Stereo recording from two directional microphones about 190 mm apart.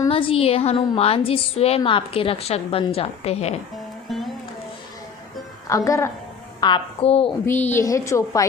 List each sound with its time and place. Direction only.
0.1 s a woman's voice: 30° left (ahead or behind)
4.1 s music: centre (ahead or behind)
5.6 s a woman's voice: 15° left (ahead or behind)
7.4 s a woman's voice: 10° left (ahead or behind)